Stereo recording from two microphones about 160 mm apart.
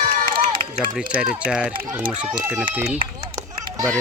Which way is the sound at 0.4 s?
40° right (ahead or behind).